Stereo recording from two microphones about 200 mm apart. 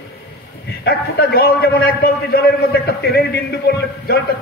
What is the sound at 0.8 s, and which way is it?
Speech, 50° left (ahead or behind).